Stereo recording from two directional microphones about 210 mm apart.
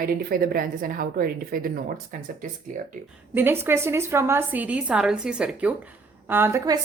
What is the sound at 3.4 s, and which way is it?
A woman's voice, 10° right (ahead or behind).